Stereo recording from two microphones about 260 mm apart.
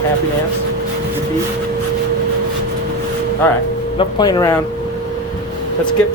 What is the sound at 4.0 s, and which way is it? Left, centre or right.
Speech, centre.